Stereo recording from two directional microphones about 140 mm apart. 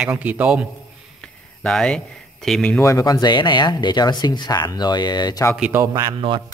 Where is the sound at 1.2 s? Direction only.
5° left (ahead or behind).